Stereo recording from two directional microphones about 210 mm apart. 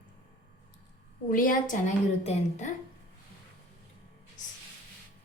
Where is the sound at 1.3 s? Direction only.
40° left (ahead or behind).